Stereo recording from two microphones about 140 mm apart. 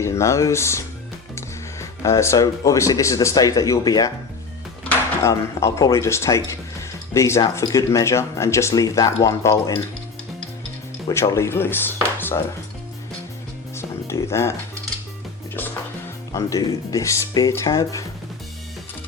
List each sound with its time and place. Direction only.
0.0 s speech: 20° left (ahead or behind)
11.1 s speech: 20° left (ahead or behind)
13.7 s music: 20° left (ahead or behind)
16.3 s speech: 25° left (ahead or behind)